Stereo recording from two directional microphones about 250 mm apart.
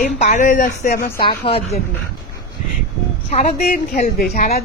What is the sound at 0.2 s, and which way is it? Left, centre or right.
Speech, left.